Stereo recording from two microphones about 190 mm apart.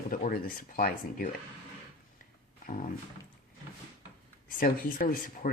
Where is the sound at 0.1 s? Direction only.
50° left (ahead or behind).